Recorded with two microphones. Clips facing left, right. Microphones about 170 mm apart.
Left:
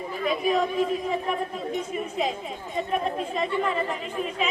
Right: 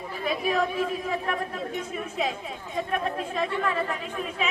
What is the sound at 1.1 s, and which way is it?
A woman's voice, centre (ahead or behind).